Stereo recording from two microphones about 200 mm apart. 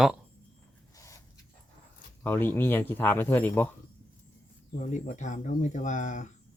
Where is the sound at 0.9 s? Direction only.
15° left (ahead or behind).